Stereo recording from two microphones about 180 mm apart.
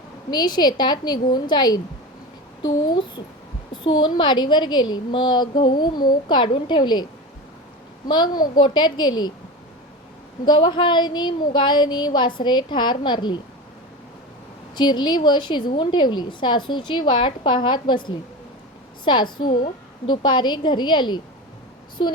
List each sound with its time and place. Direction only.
0.3 s a woman's voice: 25° left (ahead or behind)
10.4 s a woman's voice: 25° left (ahead or behind)
14.8 s a woman's voice: 25° left (ahead or behind)